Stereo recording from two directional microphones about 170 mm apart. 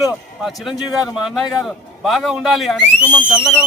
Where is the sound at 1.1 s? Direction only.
Centre (ahead or behind).